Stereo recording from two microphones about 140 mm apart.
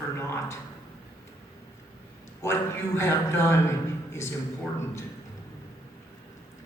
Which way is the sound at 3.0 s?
20° left (ahead or behind).